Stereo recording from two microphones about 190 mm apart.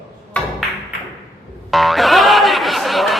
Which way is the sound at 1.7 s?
Centre (ahead or behind).